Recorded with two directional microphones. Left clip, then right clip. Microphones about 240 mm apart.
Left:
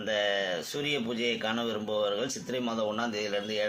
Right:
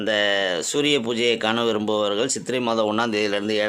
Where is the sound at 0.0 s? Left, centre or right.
Right.